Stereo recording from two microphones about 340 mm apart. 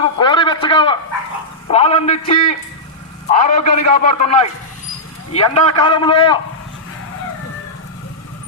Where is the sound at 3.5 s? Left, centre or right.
Left.